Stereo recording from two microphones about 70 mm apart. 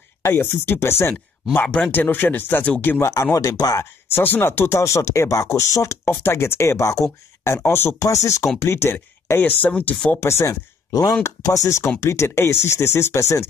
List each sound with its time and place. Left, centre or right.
0.2 s speech: left
1.5 s speech: left
3.0 s speech: left
4.1 s speech: left
6.2 s speech: left
8.0 s speech: left
8.6 s speech: left
10.2 s speech: left
10.9 s speech: left
11.4 s speech: left